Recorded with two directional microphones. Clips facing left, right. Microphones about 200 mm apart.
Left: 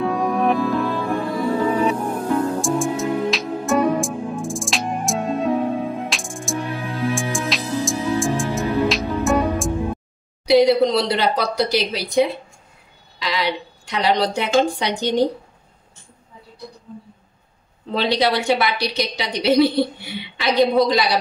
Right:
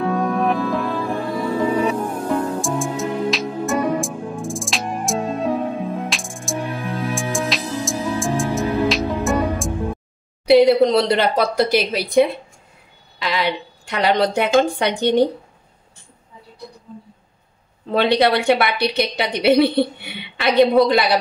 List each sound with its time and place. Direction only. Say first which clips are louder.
0.0 s music: even; centre (ahead or behind)
2.6 s music: left 2 dB; centre (ahead or behind)
10.9 s a woman's voice: right 3 dB; 50° right (ahead or behind)
17.9 s a woman's voice: right 3 dB; 55° right (ahead or behind)